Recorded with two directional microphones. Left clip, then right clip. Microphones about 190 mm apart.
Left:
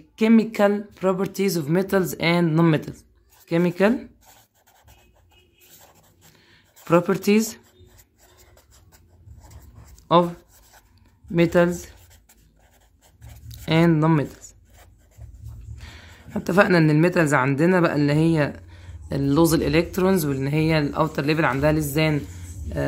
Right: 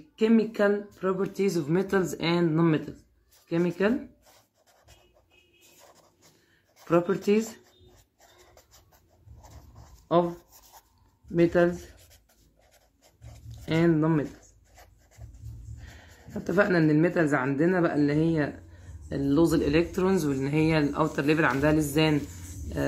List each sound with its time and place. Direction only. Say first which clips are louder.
0.1 s speech: left 4 dB; 50° left (ahead or behind)
6.8 s speech: left 5 dB; 55° left (ahead or behind)
11.3 s speech: left 4 dB; 65° left (ahead or behind)
13.5 s speech: left 5 dB; 60° left (ahead or behind)
16.3 s speech: left 6 dB; 55° left (ahead or behind); by 22.2 s 35° left (ahead or behind)